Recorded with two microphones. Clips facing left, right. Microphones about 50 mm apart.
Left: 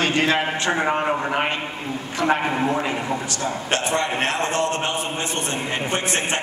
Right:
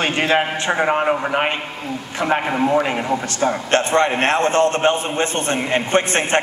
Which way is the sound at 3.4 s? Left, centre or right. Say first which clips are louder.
Right 9 dB; right.